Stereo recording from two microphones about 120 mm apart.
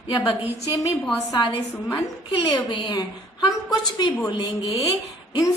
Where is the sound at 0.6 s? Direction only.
30° left (ahead or behind).